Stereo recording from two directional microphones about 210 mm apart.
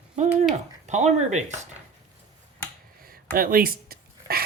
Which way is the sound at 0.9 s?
35° right (ahead or behind).